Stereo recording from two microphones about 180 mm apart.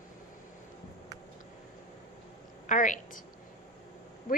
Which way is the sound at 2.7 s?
45° left (ahead or behind).